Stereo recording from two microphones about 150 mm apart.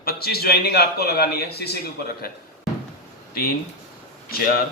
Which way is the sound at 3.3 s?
90° left.